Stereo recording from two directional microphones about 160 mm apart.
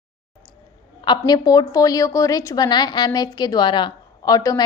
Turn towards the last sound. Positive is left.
turn(degrees=25)  # may be behind; listen again after turning